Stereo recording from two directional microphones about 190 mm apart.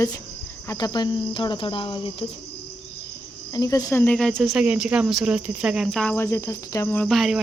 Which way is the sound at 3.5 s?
20° left (ahead or behind).